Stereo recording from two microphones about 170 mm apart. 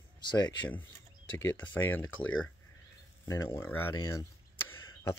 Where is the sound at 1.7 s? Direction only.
10° left (ahead or behind).